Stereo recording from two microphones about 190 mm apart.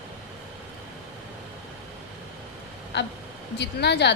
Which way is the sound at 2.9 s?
65° left (ahead or behind).